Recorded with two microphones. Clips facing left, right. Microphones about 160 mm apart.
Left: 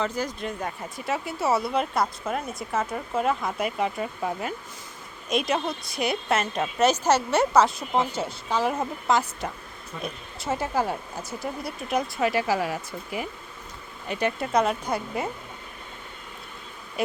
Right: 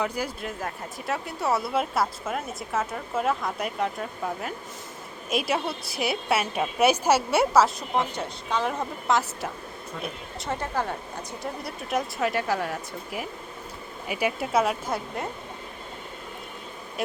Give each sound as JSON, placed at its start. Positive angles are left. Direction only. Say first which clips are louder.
{"t": 0.0, "sound": "speech", "louder": "left 1 dB", "side_deg": -10}